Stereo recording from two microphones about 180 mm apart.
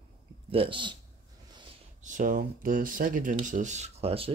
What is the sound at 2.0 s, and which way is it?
Speech, 45° right (ahead or behind).